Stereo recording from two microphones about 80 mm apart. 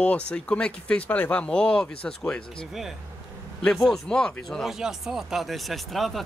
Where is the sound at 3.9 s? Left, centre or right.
Centre.